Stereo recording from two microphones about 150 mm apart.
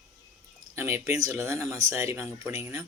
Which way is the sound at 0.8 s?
15° right (ahead or behind).